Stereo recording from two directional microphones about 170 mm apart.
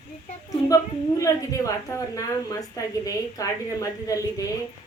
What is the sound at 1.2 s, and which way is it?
Speech, 20° left (ahead or behind).